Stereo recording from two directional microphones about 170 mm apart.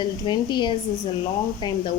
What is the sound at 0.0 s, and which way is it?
Speech, 25° left (ahead or behind).